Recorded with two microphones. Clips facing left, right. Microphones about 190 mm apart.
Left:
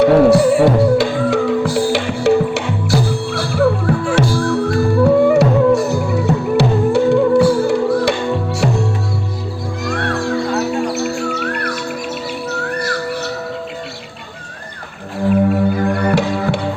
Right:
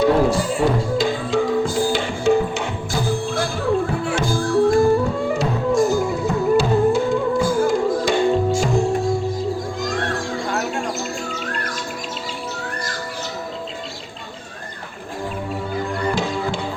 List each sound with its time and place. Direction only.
0.0 s music: 70° left (ahead or behind)
12.5 s bird: 65° left (ahead or behind)
15.3 s music: 65° left (ahead or behind)